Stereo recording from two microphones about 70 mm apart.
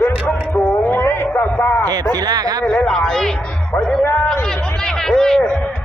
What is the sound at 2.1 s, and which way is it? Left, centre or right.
Speech, right.